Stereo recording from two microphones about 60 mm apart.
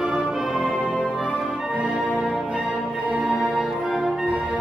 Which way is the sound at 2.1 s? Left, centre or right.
Centre.